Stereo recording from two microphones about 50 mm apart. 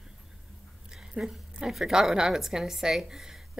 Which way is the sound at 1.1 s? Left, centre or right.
Centre.